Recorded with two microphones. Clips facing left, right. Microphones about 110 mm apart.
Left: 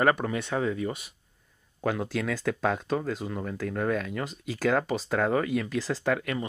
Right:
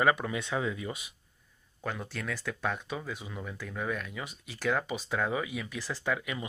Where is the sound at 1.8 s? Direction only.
85° left.